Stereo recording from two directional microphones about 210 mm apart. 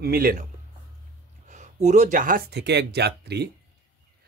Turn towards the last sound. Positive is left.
turn(degrees=-50)  # may be behind; listen again after turning